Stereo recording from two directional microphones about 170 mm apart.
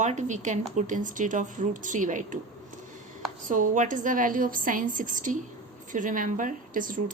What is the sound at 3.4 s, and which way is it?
A woman's voice, 50° right (ahead or behind).